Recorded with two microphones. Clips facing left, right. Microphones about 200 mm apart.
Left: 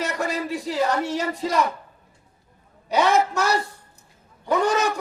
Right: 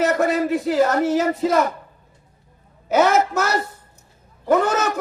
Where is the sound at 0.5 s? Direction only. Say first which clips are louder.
Right 6 dB; centre (ahead or behind).